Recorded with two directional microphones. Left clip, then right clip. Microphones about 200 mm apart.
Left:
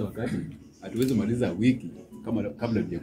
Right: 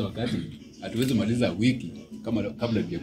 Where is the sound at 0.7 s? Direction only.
50° right (ahead or behind).